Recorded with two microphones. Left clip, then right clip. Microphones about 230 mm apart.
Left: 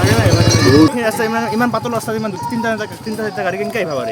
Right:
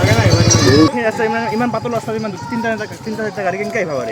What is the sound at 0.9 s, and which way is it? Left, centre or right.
Speech, centre.